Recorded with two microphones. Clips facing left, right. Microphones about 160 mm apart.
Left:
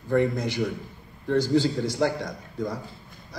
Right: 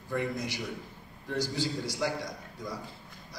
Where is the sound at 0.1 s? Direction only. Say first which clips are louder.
Left 9 dB; 55° left (ahead or behind).